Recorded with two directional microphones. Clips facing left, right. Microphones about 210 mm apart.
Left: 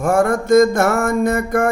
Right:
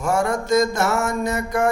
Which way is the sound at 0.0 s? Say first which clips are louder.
Left 5 dB; 55° left (ahead or behind).